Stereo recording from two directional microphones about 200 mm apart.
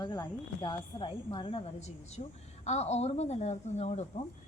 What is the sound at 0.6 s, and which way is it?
A woman's voice, 25° left (ahead or behind).